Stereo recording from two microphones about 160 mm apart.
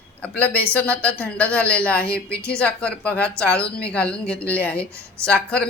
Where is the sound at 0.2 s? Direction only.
10° left (ahead or behind).